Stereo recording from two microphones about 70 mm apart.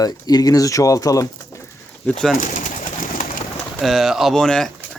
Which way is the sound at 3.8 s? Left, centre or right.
Centre.